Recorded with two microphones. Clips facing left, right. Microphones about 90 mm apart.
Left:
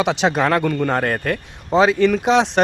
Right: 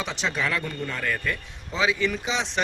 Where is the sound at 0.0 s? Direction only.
75° left (ahead or behind).